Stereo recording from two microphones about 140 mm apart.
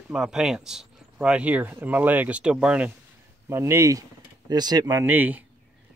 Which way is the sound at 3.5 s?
20° right (ahead or behind).